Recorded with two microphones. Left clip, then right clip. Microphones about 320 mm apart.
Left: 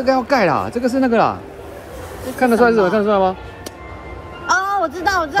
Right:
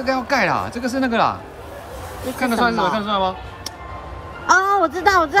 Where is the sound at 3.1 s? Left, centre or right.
Centre.